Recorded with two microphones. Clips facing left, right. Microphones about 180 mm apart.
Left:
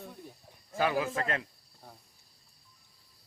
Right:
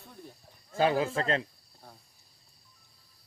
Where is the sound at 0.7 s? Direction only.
25° right (ahead or behind).